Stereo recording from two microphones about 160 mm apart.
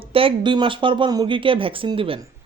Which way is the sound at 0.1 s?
35° right (ahead or behind).